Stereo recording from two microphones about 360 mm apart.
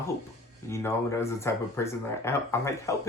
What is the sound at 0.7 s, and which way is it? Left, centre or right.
Speech, centre.